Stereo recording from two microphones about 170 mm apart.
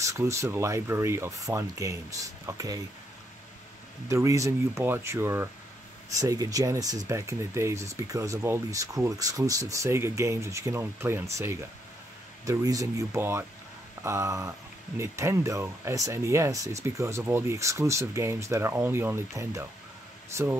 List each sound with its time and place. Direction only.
0.0 s speech: 15° right (ahead or behind)
4.1 s speech: 20° right (ahead or behind)